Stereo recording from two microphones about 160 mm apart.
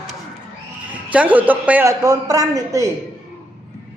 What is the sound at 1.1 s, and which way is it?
A man's voice, 10° right (ahead or behind).